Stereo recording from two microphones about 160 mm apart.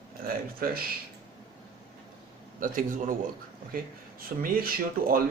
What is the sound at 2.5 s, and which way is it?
Speech, 60° right (ahead or behind).